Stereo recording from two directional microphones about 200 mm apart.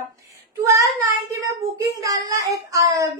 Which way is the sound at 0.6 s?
15° right (ahead or behind).